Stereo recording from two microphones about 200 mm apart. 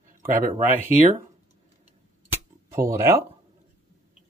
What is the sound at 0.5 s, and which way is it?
Speech, 35° right (ahead or behind).